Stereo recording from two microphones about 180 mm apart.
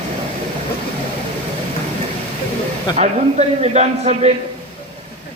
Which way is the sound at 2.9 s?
40° right (ahead or behind).